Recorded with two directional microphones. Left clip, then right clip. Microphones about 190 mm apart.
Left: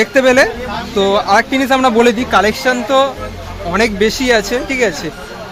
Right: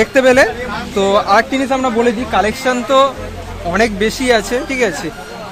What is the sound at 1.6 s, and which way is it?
Speech, 25° left (ahead or behind).